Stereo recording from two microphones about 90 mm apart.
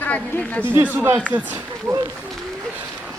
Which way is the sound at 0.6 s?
20° right (ahead or behind).